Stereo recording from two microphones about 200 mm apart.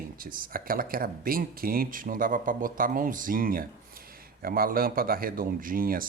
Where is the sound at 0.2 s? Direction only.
45° right (ahead or behind).